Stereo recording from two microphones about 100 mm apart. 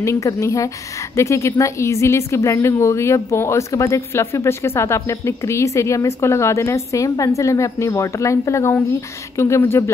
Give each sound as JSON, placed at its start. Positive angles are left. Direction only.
{"t": 0.0, "sound": "speech", "side_deg": 30}